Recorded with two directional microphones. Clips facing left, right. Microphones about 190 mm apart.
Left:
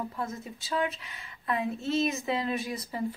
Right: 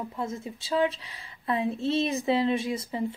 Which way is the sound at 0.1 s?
25° right (ahead or behind).